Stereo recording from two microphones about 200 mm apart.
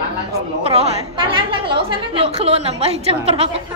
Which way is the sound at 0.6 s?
30° right (ahead or behind).